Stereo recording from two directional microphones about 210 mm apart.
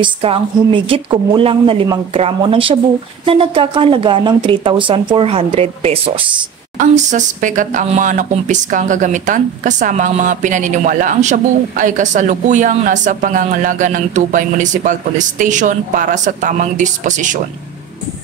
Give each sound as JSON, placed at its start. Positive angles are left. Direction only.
{"t": 0.0, "sound": "speech", "side_deg": -25}